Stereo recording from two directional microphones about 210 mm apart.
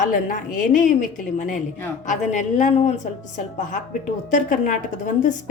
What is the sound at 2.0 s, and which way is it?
Speech, 35° left (ahead or behind).